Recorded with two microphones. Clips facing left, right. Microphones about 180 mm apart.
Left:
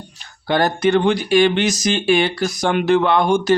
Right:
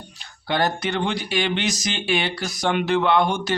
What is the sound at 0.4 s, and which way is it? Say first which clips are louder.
Speech: left 6 dB; 50° left (ahead or behind).